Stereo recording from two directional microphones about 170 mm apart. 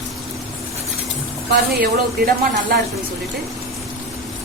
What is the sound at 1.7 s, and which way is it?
Speech, 60° right (ahead or behind).